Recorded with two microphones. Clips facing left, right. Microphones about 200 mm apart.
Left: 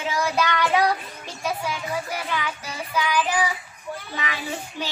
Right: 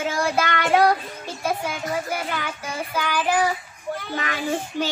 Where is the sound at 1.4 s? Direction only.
45° right (ahead or behind).